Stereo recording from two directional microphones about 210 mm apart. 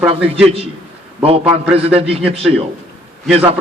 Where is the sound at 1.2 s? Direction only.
25° right (ahead or behind).